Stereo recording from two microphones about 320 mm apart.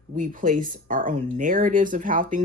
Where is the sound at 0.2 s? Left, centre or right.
Right.